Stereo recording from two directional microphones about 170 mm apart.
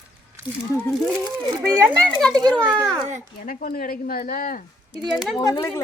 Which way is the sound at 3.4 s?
55° left (ahead or behind).